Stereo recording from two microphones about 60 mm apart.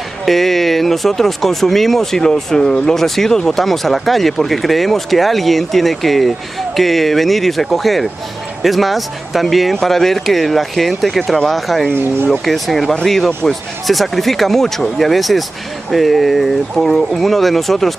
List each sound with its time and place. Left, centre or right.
0.2 s speech: centre
11.9 s speech: right
12.3 s speech: centre